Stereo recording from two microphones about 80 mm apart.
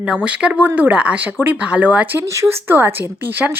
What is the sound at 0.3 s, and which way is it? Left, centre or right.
Speech, centre.